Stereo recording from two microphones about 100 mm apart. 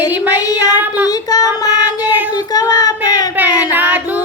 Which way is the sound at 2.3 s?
40° left (ahead or behind).